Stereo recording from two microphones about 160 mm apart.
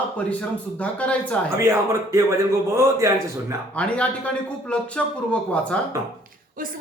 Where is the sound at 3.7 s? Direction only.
10° left (ahead or behind).